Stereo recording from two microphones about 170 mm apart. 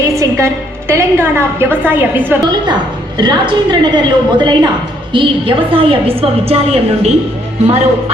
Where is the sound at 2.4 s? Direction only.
25° right (ahead or behind).